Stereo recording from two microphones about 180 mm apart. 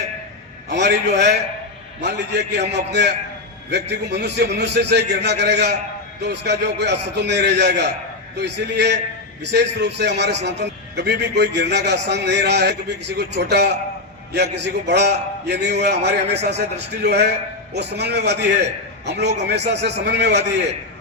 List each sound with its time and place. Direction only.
0.7 s a man's voice: 70° right (ahead or behind)